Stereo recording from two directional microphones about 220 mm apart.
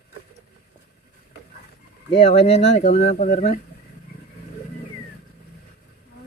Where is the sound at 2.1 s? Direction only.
25° left (ahead or behind).